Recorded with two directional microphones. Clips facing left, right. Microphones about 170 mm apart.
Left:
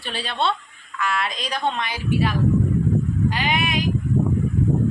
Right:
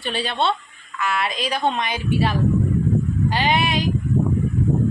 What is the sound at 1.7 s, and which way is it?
A woman's voice, 20° right (ahead or behind).